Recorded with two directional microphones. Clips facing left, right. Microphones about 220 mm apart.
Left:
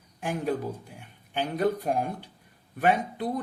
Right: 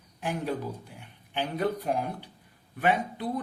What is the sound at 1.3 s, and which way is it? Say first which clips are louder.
Speech: left 3 dB; 45° left (ahead or behind).